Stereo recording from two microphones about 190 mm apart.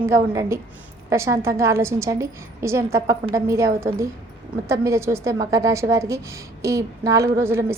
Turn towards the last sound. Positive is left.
turn(degrees=-15)  # may be behind; listen again after turning